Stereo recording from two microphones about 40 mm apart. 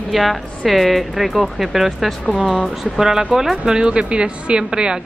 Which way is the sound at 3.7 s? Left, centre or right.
Right.